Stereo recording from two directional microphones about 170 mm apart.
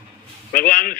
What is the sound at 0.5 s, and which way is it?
Speech, 55° left (ahead or behind).